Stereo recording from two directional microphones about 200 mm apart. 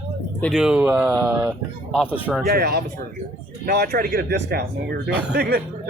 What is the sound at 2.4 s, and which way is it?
Speech, 50° right (ahead or behind).